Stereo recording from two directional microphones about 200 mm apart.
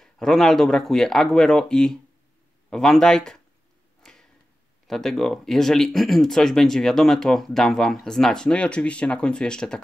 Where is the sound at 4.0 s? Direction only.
Centre (ahead or behind).